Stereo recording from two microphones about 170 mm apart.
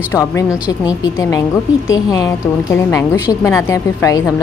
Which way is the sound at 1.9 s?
15° left (ahead or behind).